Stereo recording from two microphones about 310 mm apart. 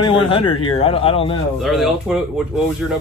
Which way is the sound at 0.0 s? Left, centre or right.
Centre.